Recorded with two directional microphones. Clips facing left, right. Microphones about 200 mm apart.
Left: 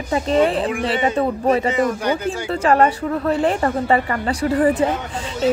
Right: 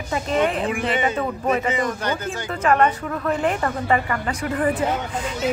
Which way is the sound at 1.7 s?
5° left (ahead or behind).